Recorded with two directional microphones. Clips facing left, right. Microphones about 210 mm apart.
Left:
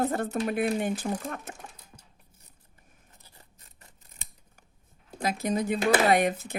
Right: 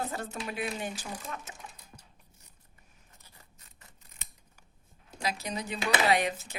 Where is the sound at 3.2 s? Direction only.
35° left (ahead or behind).